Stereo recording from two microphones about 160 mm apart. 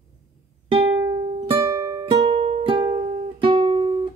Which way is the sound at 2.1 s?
35° right (ahead or behind).